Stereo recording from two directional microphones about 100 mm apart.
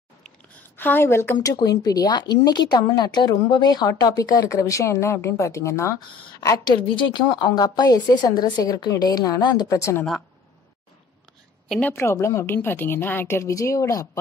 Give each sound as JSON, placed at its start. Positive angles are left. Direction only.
{"t": 0.7, "sound": "a woman's voice", "side_deg": 20}
{"t": 1.4, "sound": "speech", "side_deg": 40}
{"t": 7.0, "sound": "speech", "side_deg": 50}
{"t": 9.8, "sound": "a woman's voice", "side_deg": 30}
{"t": 11.9, "sound": "a woman's voice", "side_deg": 25}